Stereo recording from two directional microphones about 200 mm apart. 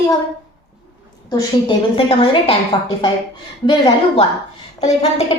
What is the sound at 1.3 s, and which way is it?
A woman's voice, 20° left (ahead or behind).